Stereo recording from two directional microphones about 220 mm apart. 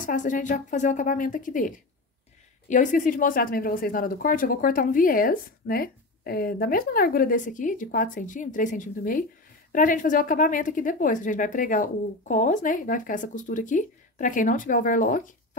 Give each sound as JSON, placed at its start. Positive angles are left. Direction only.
{"t": 0.0, "sound": "speech", "side_deg": 35}